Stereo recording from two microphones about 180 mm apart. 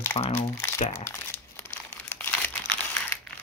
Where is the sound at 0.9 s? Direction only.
15° left (ahead or behind).